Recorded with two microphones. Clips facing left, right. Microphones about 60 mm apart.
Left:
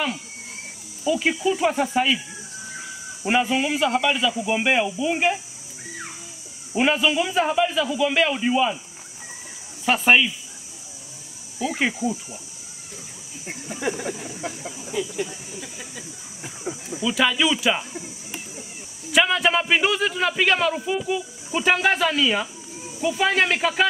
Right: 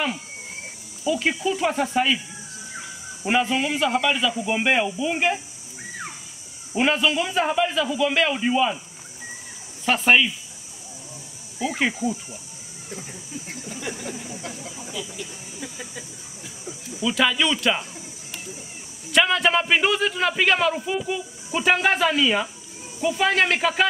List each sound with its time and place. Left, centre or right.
1.0 s a man's voice: centre
3.3 s a man's voice: centre
6.7 s a man's voice: centre
9.8 s a man's voice: centre
11.5 s a man's voice: centre
13.5 s speech: centre
14.9 s speech: left
15.6 s a man's voice: centre
16.4 s a sound: left
17.0 s a man's voice: centre
19.1 s a man's voice: centre